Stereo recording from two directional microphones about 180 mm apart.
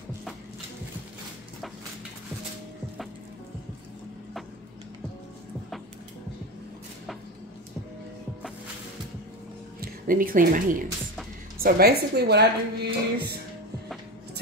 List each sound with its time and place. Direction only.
9.8 s speech: 50° right (ahead or behind)
11.6 s a woman's voice: 60° right (ahead or behind)